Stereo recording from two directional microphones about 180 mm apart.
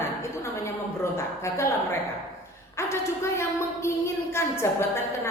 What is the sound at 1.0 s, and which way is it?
Speech, 15° left (ahead or behind).